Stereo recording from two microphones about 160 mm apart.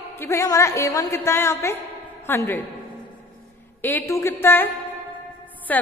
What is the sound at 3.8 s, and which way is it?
A woman's voice, 15° left (ahead or behind).